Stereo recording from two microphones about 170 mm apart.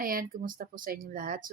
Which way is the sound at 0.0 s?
55° right (ahead or behind).